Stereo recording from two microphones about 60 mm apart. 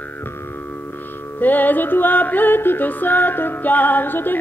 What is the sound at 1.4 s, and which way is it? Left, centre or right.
Music, left.